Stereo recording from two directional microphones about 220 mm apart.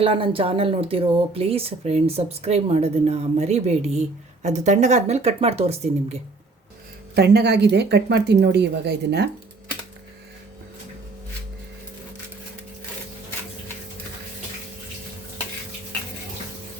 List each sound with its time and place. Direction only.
0.0 s speech: 25° right (ahead or behind)
7.2 s a woman's voice: 50° right (ahead or behind)